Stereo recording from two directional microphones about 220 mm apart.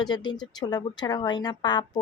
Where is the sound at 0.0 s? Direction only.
20° left (ahead or behind).